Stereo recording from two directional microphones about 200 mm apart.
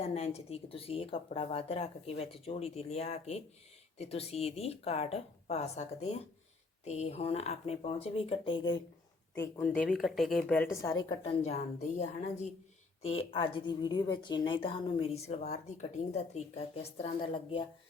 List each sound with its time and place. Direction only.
0.0 s a woman's voice: 30° left (ahead or behind)
9.3 s a woman's voice: 10° left (ahead or behind); by 17.1 s 35° left (ahead or behind)